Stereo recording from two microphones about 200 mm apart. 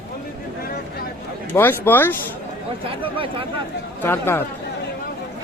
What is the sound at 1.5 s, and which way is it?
Speech, 10° left (ahead or behind).